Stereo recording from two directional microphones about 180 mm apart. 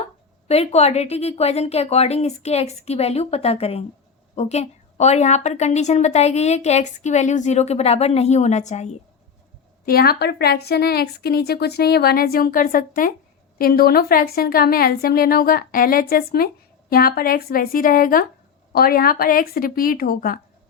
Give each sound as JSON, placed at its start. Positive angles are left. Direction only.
{"t": 0.4, "sound": "a woman's voice", "side_deg": 35}
{"t": 9.8, "sound": "a woman's voice", "side_deg": 60}